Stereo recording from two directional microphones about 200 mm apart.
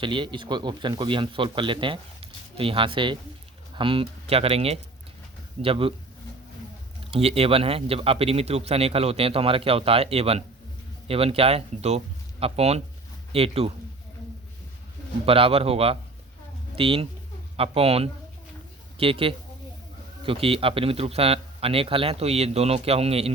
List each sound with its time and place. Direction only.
0.0 s speech: 25° right (ahead or behind)
7.1 s speech: 30° right (ahead or behind)
15.3 s speech: 30° right (ahead or behind)